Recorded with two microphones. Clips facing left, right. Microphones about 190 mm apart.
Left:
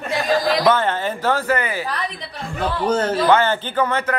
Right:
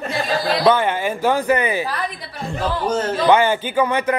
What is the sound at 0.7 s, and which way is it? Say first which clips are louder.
Speech: right 1 dB; 10° right (ahead or behind).